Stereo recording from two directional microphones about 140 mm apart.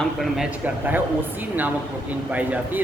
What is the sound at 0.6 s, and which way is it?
Speech, 10° right (ahead or behind).